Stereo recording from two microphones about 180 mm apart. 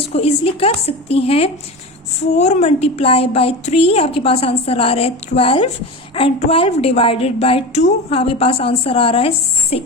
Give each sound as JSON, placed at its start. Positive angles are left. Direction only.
{"t": 0.0, "sound": "a woman's voice", "side_deg": 35}